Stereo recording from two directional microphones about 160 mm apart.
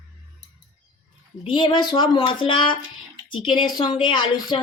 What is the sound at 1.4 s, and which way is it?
Speech, 30° left (ahead or behind).